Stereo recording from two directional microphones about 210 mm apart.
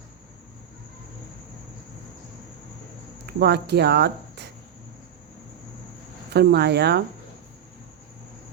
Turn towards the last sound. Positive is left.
turn(degrees=-50)  # may be behind; listen again after turning